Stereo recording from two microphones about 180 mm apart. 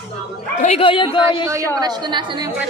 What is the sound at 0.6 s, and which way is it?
Speech, 35° left (ahead or behind).